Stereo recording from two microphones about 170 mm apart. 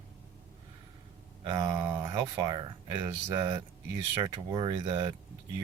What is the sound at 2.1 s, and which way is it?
Speech, 25° right (ahead or behind).